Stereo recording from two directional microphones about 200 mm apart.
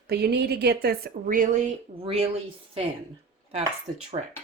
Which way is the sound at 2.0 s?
30° right (ahead or behind).